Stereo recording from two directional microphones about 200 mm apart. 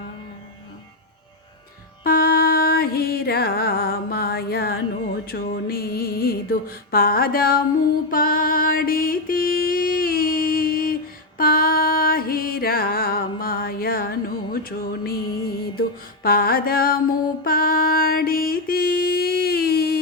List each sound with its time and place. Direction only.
2.0 s music: 50° left (ahead or behind)
5.2 s mantra: 50° left (ahead or behind)
8.1 s music: 45° left (ahead or behind)
16.2 s mantra: 50° left (ahead or behind)